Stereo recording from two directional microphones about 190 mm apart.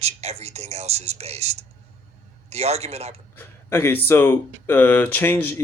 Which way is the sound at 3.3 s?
10° left (ahead or behind).